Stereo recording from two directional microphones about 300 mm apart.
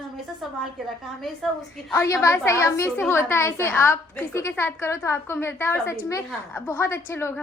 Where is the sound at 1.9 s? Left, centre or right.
Centre.